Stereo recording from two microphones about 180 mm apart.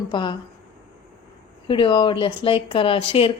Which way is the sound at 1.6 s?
25° left (ahead or behind).